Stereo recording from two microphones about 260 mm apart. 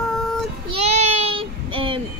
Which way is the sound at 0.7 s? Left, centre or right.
Right.